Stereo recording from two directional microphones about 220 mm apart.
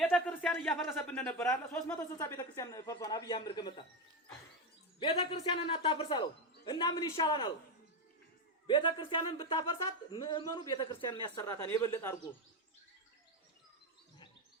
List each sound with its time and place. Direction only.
0.0 s a sound: 5° left (ahead or behind)
0.9 s speech: 10° left (ahead or behind)
4.9 s a man's voice: 25° left (ahead or behind)
8.6 s a man's voice: 20° left (ahead or behind)